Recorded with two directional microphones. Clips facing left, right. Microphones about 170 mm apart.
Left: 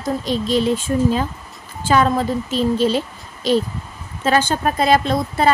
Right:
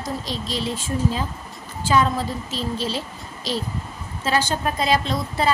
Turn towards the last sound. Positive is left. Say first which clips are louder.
# left 5 dB
turn(degrees=55)  # may be behind; listen again after turning